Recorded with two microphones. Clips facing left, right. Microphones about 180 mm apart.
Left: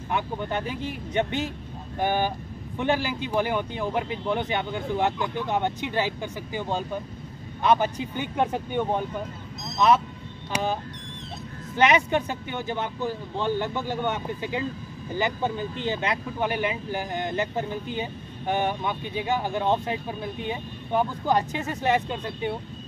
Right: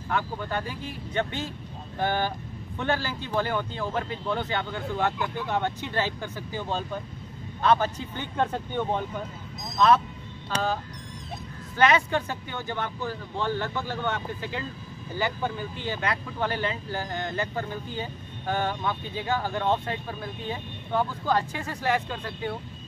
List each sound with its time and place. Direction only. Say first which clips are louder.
0.1 s speech: left 1 dB; 20° left (ahead or behind)